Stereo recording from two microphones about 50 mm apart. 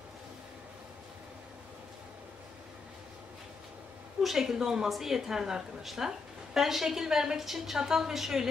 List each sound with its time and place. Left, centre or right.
4.2 s a woman's voice: centre